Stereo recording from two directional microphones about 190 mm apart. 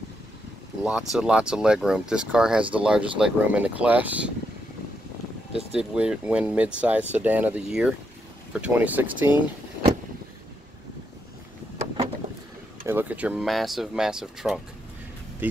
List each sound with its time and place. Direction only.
0.8 s speech: 5° right (ahead or behind)
5.5 s speech: 30° right (ahead or behind)
5.8 s speech: 5° right (ahead or behind)
12.8 s speech: 10° right (ahead or behind)